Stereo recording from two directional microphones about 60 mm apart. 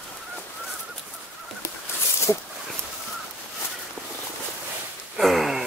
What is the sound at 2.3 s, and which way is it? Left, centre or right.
Speech, left.